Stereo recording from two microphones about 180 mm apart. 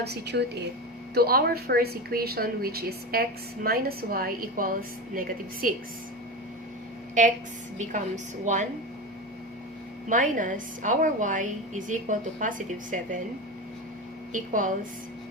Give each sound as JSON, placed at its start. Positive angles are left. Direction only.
{"t": 0.0, "sound": "speech", "side_deg": -70}
{"t": 7.1, "sound": "a woman's voice", "side_deg": -45}
{"t": 10.1, "sound": "a woman's voice", "side_deg": -45}
{"t": 14.3, "sound": "a woman's voice", "side_deg": -45}